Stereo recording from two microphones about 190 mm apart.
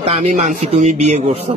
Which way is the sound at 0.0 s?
30° right (ahead or behind).